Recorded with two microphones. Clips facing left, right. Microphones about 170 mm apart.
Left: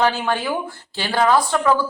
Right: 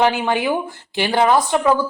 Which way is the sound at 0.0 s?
15° right (ahead or behind).